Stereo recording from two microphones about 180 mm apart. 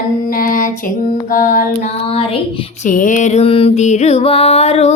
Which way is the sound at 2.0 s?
30° left (ahead or behind).